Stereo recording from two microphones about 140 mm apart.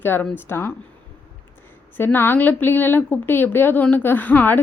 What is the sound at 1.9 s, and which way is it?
A woman's voice, 15° left (ahead or behind).